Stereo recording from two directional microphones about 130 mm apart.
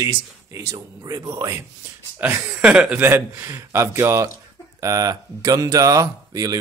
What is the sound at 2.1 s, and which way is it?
Speech, 15° right (ahead or behind).